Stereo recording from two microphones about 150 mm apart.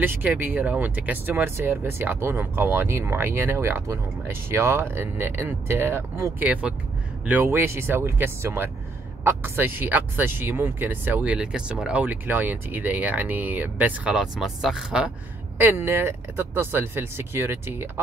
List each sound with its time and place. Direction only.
0.0 s speech: 15° right (ahead or behind)